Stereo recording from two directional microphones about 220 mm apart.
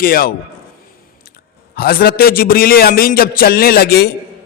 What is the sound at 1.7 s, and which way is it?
A man's voice, 45° left (ahead or behind).